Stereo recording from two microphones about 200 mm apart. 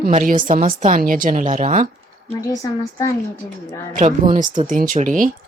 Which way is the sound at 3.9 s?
40° right (ahead or behind).